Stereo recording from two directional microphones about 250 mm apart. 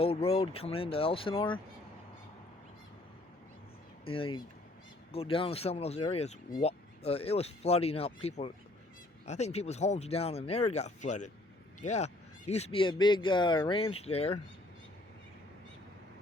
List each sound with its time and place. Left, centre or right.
0.0 s speech: left
4.0 s speech: left